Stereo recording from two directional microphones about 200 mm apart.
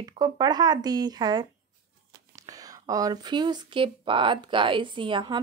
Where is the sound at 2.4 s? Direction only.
20° right (ahead or behind).